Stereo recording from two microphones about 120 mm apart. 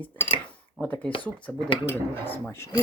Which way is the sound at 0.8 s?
10° left (ahead or behind).